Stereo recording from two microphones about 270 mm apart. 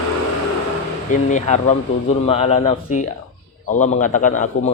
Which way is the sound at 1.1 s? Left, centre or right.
Left.